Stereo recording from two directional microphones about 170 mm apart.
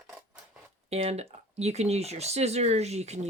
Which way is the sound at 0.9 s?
40° right (ahead or behind).